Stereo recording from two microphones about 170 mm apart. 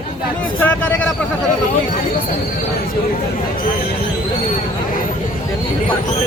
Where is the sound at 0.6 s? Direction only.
10° left (ahead or behind).